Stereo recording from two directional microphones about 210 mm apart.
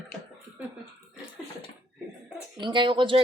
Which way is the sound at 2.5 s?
20° right (ahead or behind).